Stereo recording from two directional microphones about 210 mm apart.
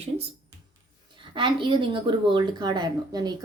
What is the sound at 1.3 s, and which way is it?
A woman's voice, 25° right (ahead or behind).